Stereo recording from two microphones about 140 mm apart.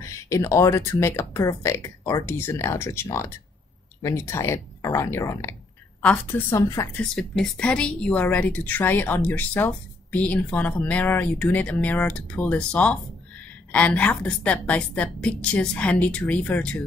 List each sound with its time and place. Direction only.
0.0 s a woman's voice: 20° left (ahead or behind)